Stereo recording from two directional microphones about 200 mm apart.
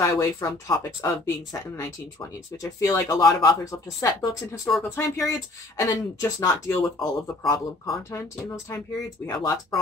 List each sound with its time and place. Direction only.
0.0 s speech: 15° left (ahead or behind)
4.6 s speech: centre (ahead or behind)
4.9 s speech: 15° left (ahead or behind)